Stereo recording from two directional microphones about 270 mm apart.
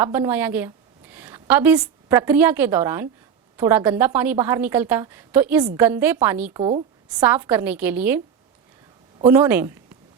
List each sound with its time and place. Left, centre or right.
0.0 s a woman's voice: centre
6.6 s a woman's voice: centre
7.1 s a woman's voice: centre
9.2 s a woman's voice: centre